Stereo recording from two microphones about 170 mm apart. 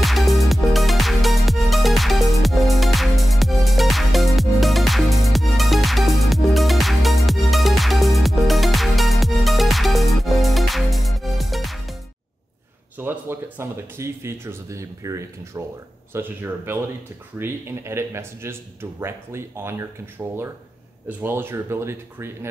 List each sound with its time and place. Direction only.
0.0 s music: centre (ahead or behind)
12.9 s speech: 10° right (ahead or behind)